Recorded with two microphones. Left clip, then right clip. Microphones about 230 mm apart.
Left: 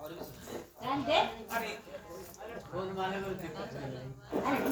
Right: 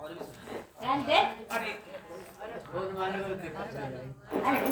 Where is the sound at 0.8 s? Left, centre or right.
Right.